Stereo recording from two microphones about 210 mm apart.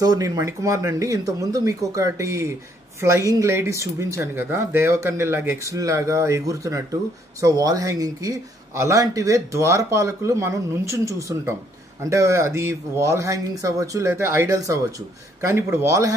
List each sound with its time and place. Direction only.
0.0 s speech: 20° right (ahead or behind)